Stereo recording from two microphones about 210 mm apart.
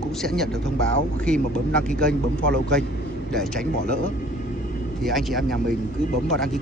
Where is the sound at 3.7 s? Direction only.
35° left (ahead or behind).